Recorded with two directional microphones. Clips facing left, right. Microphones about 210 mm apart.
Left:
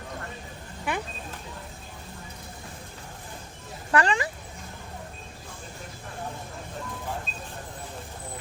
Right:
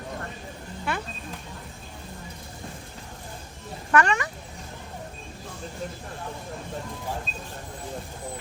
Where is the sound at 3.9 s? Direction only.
30° left (ahead or behind).